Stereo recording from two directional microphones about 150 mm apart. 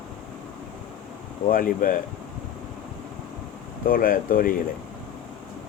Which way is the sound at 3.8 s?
70° left (ahead or behind).